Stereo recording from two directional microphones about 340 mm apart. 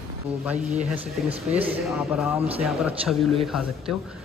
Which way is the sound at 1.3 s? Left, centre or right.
Centre.